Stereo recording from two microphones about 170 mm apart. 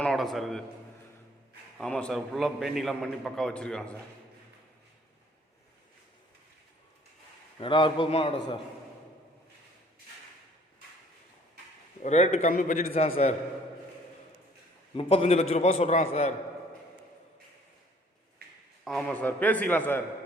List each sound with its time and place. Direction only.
0.0 s a sound: centre (ahead or behind)
1.8 s a man's voice: 5° left (ahead or behind)
7.6 s a man's voice: 30° left (ahead or behind)
12.0 s a man's voice: 40° left (ahead or behind)
12.9 s a man's voice: 35° left (ahead or behind)
14.9 s a man's voice: 35° left (ahead or behind)
18.9 s a man's voice: 5° left (ahead or behind)